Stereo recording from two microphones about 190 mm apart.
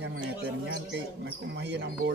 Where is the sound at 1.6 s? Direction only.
65° right (ahead or behind).